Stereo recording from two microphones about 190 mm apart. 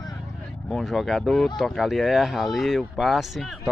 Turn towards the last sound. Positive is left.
turn(degrees=0)  # may be behind; listen again after turning